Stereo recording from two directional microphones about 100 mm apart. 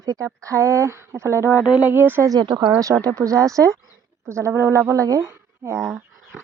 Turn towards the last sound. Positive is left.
turn(degrees=-25)  # may be behind; listen again after turning